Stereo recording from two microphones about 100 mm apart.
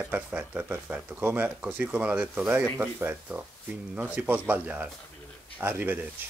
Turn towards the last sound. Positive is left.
turn(degrees=-20)  # may be behind; listen again after turning